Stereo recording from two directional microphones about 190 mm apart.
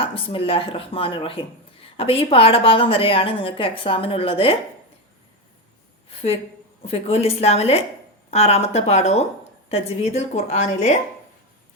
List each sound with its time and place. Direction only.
0.0 s speech: 30° left (ahead or behind)
6.8 s a woman's voice: 35° left (ahead or behind)